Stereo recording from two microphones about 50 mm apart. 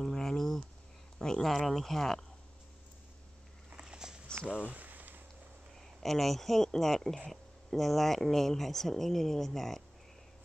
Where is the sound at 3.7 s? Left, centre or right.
Centre.